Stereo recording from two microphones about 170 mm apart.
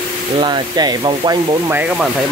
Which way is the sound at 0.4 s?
25° right (ahead or behind).